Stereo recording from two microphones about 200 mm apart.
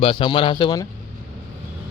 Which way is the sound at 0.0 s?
25° left (ahead or behind).